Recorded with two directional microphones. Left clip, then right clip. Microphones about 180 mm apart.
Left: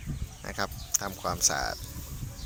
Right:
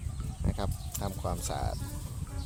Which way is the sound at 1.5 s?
5° right (ahead or behind).